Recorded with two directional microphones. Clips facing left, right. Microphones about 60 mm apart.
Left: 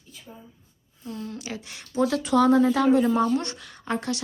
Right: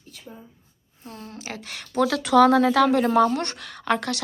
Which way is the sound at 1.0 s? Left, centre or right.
Right.